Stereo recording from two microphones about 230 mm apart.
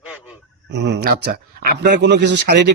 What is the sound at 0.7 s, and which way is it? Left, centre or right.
Speech, right.